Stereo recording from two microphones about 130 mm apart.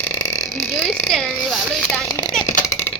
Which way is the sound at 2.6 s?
20° left (ahead or behind).